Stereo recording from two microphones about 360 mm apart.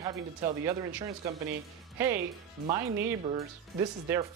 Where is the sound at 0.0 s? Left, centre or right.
Centre.